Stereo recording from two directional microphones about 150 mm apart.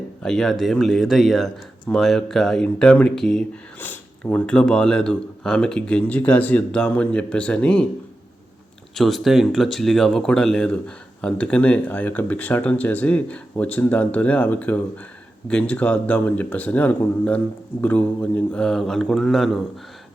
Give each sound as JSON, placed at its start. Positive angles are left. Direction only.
{"t": 0.2, "sound": "speech", "side_deg": 5}
{"t": 9.0, "sound": "speech", "side_deg": 0}